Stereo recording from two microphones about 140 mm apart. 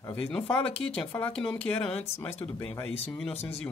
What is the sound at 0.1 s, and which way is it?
Speech, 15° left (ahead or behind).